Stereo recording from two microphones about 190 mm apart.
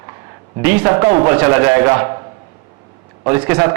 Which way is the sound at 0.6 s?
10° right (ahead or behind).